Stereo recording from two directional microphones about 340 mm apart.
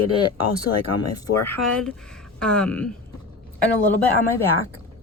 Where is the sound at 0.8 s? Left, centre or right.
Left.